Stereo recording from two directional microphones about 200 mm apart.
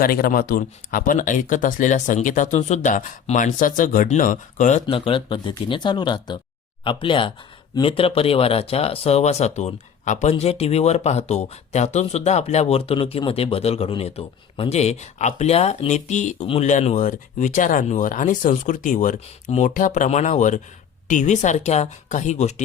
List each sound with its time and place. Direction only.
0.0 s speech: 45° left (ahead or behind)